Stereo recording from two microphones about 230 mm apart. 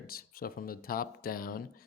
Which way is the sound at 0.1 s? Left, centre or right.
Left.